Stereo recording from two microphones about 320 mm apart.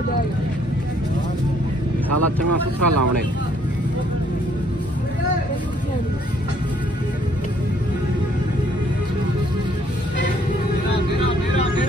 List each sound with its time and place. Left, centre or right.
2.1 s speech: right